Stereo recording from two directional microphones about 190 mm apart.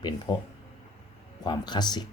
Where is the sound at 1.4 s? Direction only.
20° left (ahead or behind).